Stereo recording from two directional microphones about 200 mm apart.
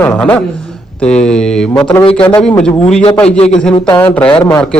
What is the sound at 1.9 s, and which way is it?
Speech, 20° left (ahead or behind).